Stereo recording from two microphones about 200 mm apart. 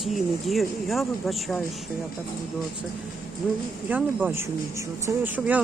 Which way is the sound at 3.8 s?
5° right (ahead or behind).